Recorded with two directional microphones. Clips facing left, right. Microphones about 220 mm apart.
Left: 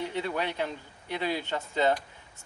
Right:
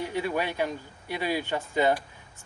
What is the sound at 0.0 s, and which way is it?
Speech, 10° right (ahead or behind).